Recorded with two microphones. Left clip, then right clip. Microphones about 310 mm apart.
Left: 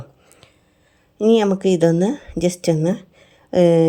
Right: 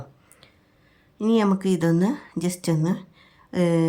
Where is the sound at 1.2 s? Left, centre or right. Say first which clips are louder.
Left 7 dB; centre.